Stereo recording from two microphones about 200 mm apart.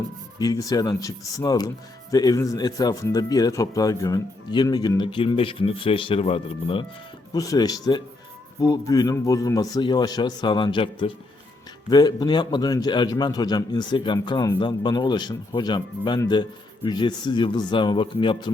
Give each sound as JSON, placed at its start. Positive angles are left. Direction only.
{"t": 0.3, "sound": "a man's voice", "side_deg": 20}
{"t": 7.3, "sound": "a man's voice", "side_deg": 15}